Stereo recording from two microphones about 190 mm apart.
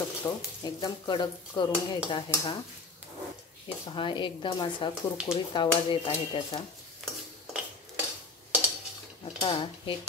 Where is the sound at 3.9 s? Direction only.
25° left (ahead or behind).